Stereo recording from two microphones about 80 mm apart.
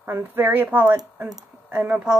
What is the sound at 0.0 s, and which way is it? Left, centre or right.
A woman's voice, right.